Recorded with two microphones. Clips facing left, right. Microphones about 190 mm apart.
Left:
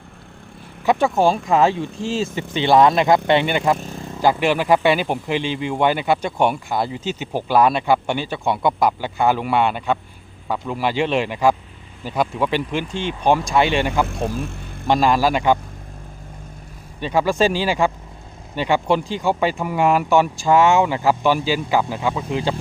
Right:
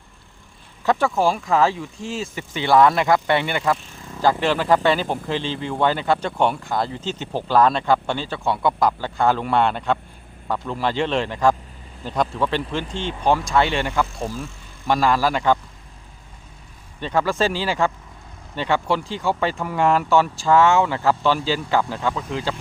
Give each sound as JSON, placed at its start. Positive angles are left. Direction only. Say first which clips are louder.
{"t": 0.9, "sound": "speech", "louder": "left 3 dB", "side_deg": 20}
{"t": 3.8, "sound": "speech", "louder": "left 12 dB", "side_deg": 40}
{"t": 4.2, "sound": "a man's voice", "louder": "left 2 dB", "side_deg": 15}
{"t": 14.1, "sound": "speech", "louder": "left 4 dB", "side_deg": 65}
{"t": 14.8, "sound": "a man's voice", "louder": "left 2 dB", "side_deg": 20}
{"t": 17.0, "sound": "a man's voice", "louder": "left 3 dB", "side_deg": 10}